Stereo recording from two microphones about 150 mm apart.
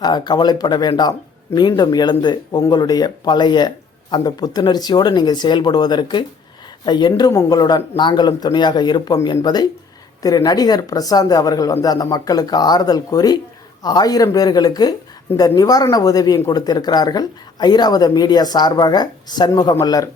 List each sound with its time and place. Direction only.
0.0 s speech: 30° left (ahead or behind)